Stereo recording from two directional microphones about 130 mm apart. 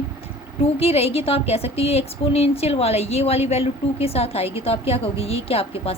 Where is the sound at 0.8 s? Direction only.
50° left (ahead or behind).